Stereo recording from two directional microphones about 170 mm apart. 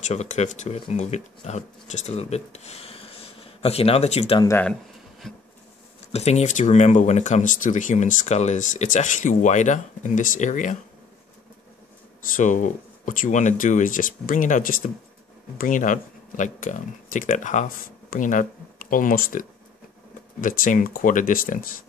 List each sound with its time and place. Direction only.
0.1 s speech: 40° left (ahead or behind)
6.1 s speech: 40° left (ahead or behind)
12.4 s speech: 50° left (ahead or behind)